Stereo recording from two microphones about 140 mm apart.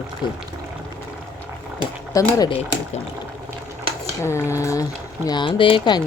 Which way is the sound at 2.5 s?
50° left (ahead or behind).